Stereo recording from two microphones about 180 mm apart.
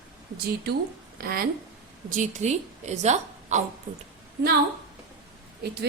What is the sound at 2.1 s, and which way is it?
A woman's voice, 40° right (ahead or behind).